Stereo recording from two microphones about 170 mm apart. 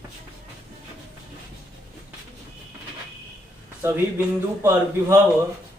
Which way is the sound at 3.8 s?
15° right (ahead or behind).